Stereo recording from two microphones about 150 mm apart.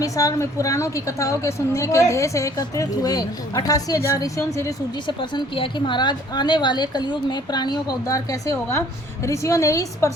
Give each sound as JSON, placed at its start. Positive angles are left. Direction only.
{"t": 0.0, "sound": "a woman's voice", "side_deg": 20}
{"t": 5.0, "sound": "a woman's voice", "side_deg": 30}